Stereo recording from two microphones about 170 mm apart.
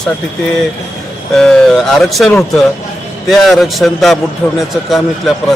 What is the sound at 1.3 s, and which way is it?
A man's voice, 5° left (ahead or behind).